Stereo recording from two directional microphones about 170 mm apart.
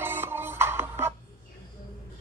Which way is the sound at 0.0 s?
10° right (ahead or behind).